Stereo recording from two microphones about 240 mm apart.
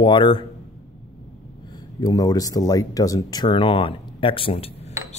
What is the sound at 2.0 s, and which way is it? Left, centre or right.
Speech, centre.